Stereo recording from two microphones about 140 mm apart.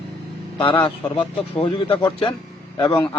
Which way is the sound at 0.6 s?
40° left (ahead or behind).